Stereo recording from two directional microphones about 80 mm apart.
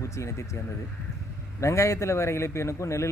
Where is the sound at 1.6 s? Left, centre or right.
Left.